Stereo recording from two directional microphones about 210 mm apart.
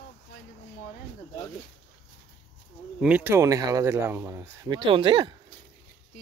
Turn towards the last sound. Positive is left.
turn(degrees=-25)  # may be behind; listen again after turning